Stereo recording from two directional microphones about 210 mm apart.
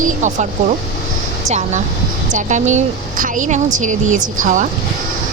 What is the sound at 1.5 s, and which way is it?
Speech, 35° right (ahead or behind).